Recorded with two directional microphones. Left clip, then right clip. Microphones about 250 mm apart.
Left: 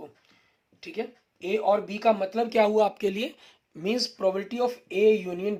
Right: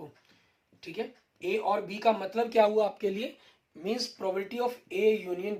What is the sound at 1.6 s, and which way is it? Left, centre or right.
Speech, left.